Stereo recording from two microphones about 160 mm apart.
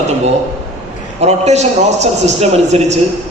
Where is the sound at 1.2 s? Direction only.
45° right (ahead or behind).